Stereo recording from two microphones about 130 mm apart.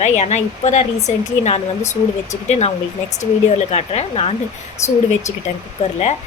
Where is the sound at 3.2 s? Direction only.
60° left (ahead or behind).